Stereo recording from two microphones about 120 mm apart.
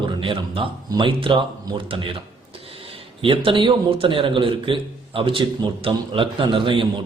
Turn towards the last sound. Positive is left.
turn(degrees=-45)  # may be behind; listen again after turning